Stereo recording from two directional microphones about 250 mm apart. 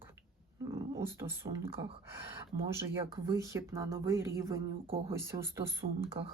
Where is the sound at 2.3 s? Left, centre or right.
Centre.